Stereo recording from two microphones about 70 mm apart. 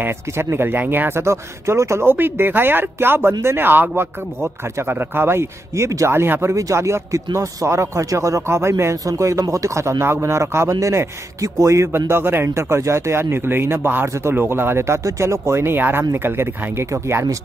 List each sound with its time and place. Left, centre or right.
0.0 s speech: right
6.5 s a man's voice: right